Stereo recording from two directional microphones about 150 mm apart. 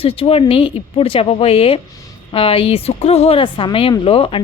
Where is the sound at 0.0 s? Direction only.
40° left (ahead or behind).